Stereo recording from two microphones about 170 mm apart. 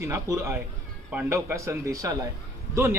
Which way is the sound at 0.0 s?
15° right (ahead or behind).